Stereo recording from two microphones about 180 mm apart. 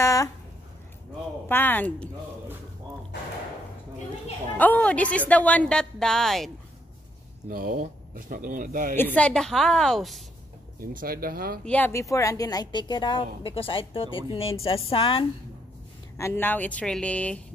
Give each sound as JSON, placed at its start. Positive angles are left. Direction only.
{"t": 0.0, "sound": "a sound", "side_deg": 20}
{"t": 1.5, "sound": "speech", "side_deg": 10}
{"t": 4.6, "sound": "a woman's voice", "side_deg": 10}
{"t": 7.4, "sound": "speech", "side_deg": -50}
{"t": 8.9, "sound": "a woman's voice", "side_deg": 10}
{"t": 10.8, "sound": "speech", "side_deg": -50}
{"t": 11.6, "sound": "a woman's voice", "side_deg": 10}
{"t": 16.2, "sound": "speech", "side_deg": 15}